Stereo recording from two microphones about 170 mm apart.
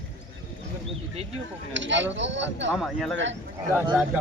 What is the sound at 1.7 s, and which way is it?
Speech, 90° right.